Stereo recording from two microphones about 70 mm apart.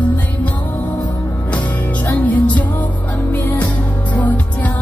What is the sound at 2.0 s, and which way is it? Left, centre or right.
Music, left.